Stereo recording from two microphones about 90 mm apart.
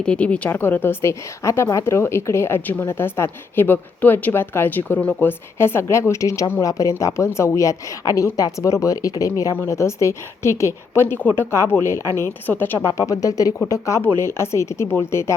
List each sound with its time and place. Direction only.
0.0 s a woman's voice: 10° left (ahead or behind); by 15.4 s 30° left (ahead or behind)